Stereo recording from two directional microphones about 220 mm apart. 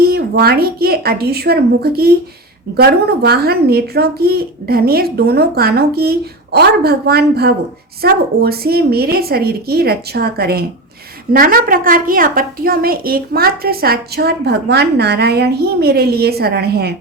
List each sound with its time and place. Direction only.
0.0 s a woman's voice: 45° right (ahead or behind)